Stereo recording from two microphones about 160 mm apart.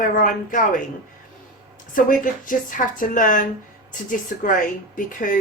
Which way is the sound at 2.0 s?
55° left (ahead or behind).